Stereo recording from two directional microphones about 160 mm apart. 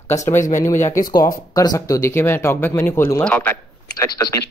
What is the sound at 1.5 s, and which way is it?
Speech, 20° left (ahead or behind).